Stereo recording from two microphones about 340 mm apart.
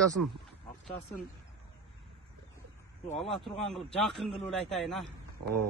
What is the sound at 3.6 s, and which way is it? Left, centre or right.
Speech, centre.